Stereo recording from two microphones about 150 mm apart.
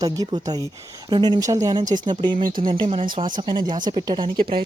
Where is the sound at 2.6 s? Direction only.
35° right (ahead or behind).